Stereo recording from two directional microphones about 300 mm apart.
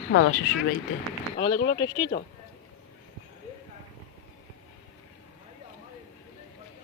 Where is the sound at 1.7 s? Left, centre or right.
Centre.